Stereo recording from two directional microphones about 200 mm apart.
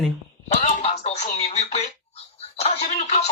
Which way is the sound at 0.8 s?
30° left (ahead or behind).